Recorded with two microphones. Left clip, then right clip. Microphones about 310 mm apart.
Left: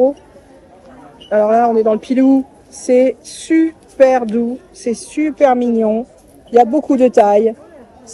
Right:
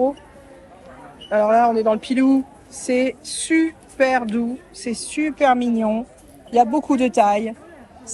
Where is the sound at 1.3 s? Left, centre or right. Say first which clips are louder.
Left 4 dB; centre.